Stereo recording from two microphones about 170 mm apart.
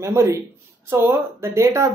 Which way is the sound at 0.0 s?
15° right (ahead or behind).